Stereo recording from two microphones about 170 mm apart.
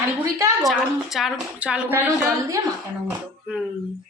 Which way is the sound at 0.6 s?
Centre (ahead or behind).